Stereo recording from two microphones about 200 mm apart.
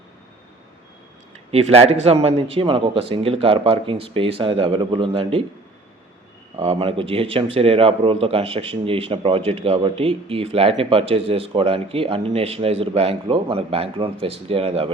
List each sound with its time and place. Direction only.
1.7 s speech: 30° right (ahead or behind)
6.6 s speech: 30° right (ahead or behind)